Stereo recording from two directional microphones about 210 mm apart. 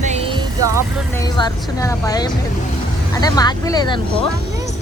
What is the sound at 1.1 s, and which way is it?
Speech, 15° left (ahead or behind).